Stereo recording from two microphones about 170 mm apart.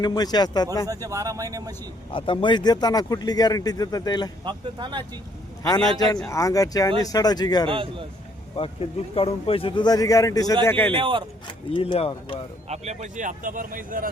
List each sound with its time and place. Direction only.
0.0 s speech: 25° left (ahead or behind)
0.9 s speech: 20° right (ahead or behind)
2.1 s speech: 30° left (ahead or behind)
4.4 s speech: 25° right (ahead or behind)
6.2 s speech: 20° left (ahead or behind)
7.7 s a man's voice: 30° right (ahead or behind)
8.5 s speech: 35° left (ahead or behind); by 10.9 s 10° left (ahead or behind)
10.9 s a man's voice: 30° right (ahead or behind)
11.4 s speech: 30° left (ahead or behind)
12.6 s speech: 40° right (ahead or behind)